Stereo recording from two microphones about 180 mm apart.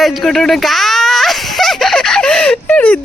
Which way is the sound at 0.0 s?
Centre (ahead or behind).